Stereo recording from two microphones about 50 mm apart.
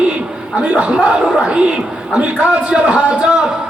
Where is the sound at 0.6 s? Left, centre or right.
Right.